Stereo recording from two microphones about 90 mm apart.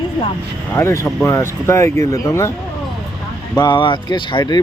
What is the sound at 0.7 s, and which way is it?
Speech, 30° left (ahead or behind).